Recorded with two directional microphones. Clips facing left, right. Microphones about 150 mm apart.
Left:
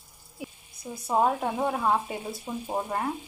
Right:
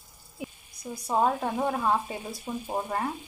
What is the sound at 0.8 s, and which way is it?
Frying, 25° left (ahead or behind).